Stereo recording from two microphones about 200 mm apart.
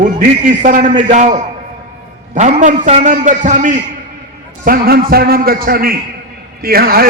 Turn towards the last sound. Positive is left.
turn(degrees=-50)  # may be behind; listen again after turning